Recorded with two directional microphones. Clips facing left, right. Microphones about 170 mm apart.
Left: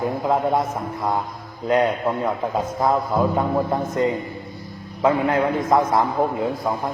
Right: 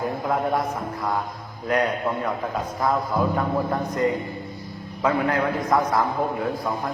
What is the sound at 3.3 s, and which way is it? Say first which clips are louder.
A man's voice: left 3 dB; 25° left (ahead or behind).